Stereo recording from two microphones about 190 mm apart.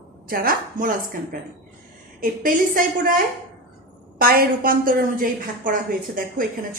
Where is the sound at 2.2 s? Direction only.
45° right (ahead or behind).